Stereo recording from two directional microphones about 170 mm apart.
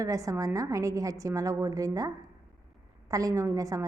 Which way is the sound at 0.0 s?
20° right (ahead or behind).